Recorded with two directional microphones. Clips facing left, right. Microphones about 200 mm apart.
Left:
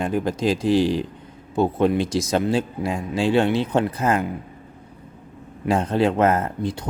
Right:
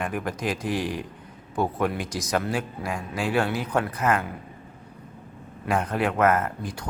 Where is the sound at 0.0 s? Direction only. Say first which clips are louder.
Left 7 dB; 30° left (ahead or behind).